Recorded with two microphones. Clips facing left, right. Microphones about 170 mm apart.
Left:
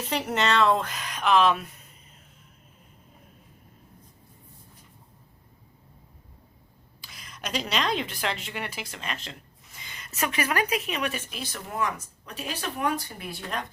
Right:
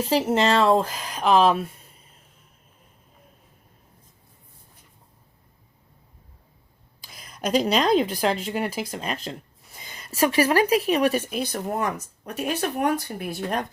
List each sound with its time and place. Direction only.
0.0 s speech: 30° right (ahead or behind)
7.0 s a woman's voice: 45° right (ahead or behind)
9.7 s a sound: 35° right (ahead or behind)
10.2 s speech: 35° right (ahead or behind)
11.3 s speech: 50° right (ahead or behind)